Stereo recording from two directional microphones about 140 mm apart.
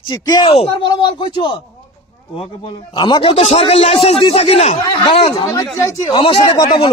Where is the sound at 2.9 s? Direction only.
30° left (ahead or behind); by 4.8 s 50° left (ahead or behind).